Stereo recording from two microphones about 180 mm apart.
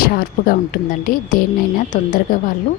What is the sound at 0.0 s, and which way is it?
A woman's voice, 55° left (ahead or behind).